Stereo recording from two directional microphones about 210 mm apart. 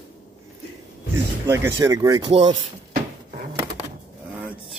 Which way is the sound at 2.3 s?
25° right (ahead or behind).